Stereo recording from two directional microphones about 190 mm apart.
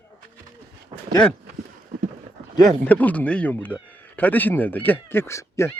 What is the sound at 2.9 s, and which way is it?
Speech, 10° left (ahead or behind).